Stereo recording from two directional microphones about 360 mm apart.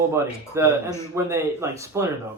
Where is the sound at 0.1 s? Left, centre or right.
Centre.